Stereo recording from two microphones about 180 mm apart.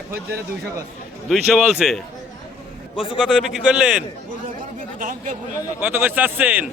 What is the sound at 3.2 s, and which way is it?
Speech, centre (ahead or behind).